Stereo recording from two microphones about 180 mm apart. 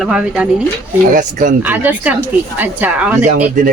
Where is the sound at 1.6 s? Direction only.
10° right (ahead or behind).